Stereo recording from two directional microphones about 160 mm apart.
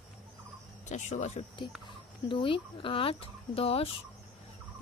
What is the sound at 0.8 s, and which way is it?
Speech, 45° left (ahead or behind).